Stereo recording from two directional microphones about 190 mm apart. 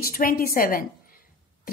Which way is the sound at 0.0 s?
50° left (ahead or behind).